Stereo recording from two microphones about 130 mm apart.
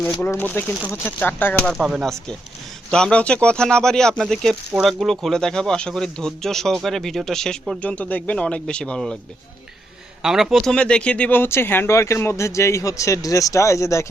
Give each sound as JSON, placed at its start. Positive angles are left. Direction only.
{"t": 0.2, "sound": "speech", "side_deg": 15}
{"t": 1.6, "sound": "speech", "side_deg": 0}
{"t": 10.2, "sound": "speech", "side_deg": -5}